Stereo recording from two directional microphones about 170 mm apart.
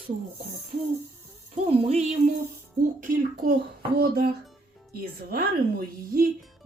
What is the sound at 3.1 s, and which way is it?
A child's voice, 60° right (ahead or behind).